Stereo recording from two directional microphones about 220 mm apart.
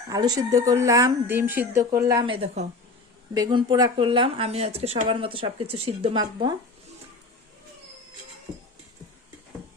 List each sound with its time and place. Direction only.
0.1 s speech: 15° right (ahead or behind)